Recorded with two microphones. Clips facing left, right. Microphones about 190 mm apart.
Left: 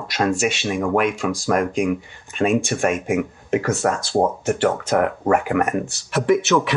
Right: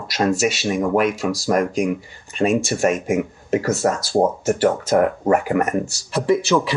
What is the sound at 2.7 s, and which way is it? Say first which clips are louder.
Speech: right 2 dB; 40° right (ahead or behind).